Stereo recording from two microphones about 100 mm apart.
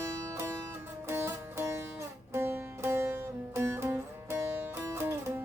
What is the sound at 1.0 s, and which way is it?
Music, 25° right (ahead or behind).